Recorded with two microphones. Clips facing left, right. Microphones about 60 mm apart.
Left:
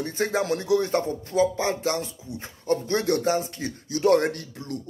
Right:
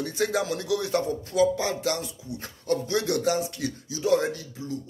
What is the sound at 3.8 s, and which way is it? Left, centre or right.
Speech, left.